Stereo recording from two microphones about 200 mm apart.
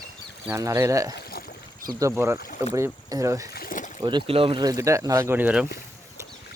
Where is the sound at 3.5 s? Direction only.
45° left (ahead or behind).